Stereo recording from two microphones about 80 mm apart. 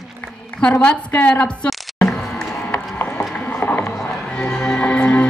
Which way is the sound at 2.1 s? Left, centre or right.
Centre.